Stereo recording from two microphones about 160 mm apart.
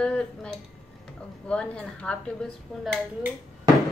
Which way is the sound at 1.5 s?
5° left (ahead or behind).